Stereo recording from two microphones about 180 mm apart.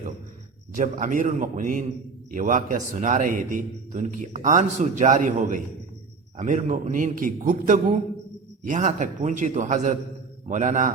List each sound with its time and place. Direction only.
0.8 s a man's voice: 45° right (ahead or behind)